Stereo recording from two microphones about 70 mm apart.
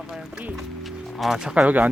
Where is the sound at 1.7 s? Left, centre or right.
Right.